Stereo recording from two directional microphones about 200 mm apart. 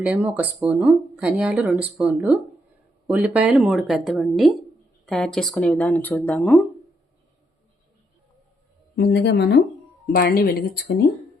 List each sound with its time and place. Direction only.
0.0 s a woman's voice: 5° right (ahead or behind); by 6.6 s 10° left (ahead or behind)
9.0 s speech: 55° left (ahead or behind)